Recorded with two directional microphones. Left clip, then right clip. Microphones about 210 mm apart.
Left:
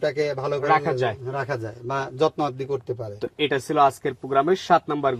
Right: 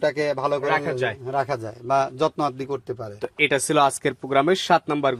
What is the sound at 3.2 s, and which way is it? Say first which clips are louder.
Speech: right 4 dB; centre (ahead or behind).